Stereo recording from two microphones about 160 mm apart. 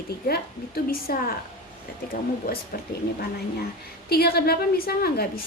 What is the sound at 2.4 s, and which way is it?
Speech, 70° left (ahead or behind).